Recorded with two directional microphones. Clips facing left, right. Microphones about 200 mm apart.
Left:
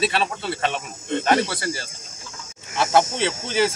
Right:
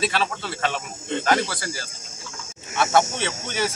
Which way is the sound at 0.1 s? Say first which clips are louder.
Left 2 dB; 25° left (ahead or behind).